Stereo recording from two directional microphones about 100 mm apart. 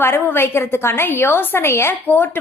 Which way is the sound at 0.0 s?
20° left (ahead or behind).